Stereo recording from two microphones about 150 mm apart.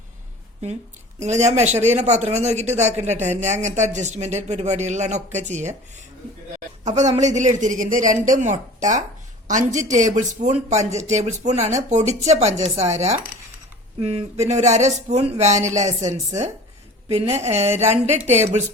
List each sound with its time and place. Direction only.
1.2 s speech: 50° right (ahead or behind)
6.8 s a woman's voice: 50° right (ahead or behind)